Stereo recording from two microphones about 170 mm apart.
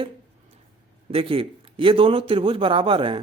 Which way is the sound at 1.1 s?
30° right (ahead or behind).